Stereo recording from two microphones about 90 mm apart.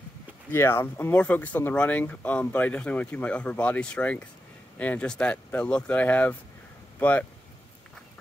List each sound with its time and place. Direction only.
0.5 s speech: 25° left (ahead or behind)
1.1 s speech: 15° left (ahead or behind)